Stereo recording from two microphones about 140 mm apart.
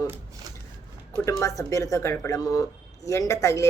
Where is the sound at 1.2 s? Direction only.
20° left (ahead or behind).